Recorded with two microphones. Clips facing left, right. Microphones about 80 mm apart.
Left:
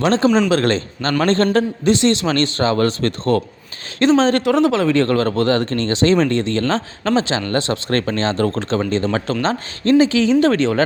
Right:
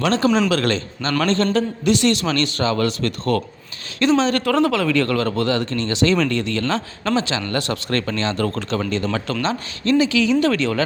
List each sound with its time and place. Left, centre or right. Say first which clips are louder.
0.0 s speech: left 3 dB; left
0.3 s a man's voice: left 1 dB; centre
0.5 s a man's voice: left 3 dB; left
4.4 s speech: left 3 dB; centre